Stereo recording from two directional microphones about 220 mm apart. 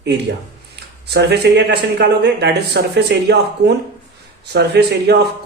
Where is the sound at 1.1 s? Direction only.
50° right (ahead or behind).